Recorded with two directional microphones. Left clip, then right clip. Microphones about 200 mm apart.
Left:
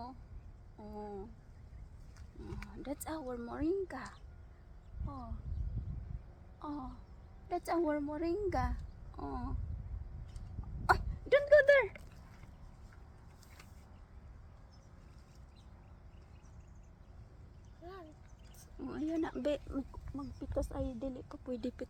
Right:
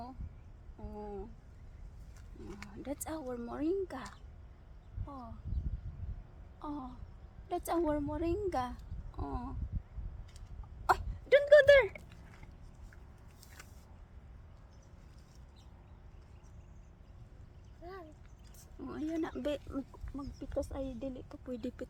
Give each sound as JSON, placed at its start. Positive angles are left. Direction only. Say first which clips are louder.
{"t": 0.8, "sound": "a sound", "louder": "right 1 dB", "side_deg": 10}
{"t": 2.5, "sound": "speech", "louder": "right 1 dB", "side_deg": 5}
{"t": 6.6, "sound": "a woman's voice", "louder": "right 1 dB", "side_deg": 5}
{"t": 10.8, "sound": "hiccup", "louder": "right 1 dB", "side_deg": 0}
{"t": 18.8, "sound": "speech", "louder": "even", "side_deg": 15}